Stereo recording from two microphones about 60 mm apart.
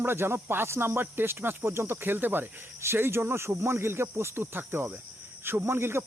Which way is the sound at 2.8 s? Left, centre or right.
Right.